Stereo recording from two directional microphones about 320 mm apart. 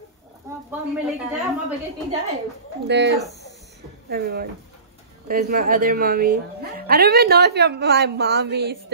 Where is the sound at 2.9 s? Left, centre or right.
Right.